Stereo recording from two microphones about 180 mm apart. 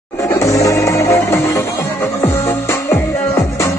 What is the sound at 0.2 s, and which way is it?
Music, 15° left (ahead or behind).